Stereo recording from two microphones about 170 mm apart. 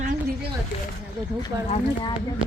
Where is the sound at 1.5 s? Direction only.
25° right (ahead or behind).